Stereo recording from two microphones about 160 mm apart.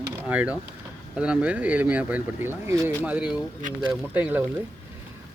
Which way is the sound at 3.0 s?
5° right (ahead or behind).